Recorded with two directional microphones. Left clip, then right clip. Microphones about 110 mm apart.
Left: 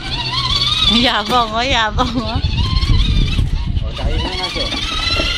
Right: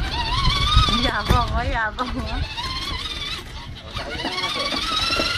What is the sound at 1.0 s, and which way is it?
Speech, 25° left (ahead or behind).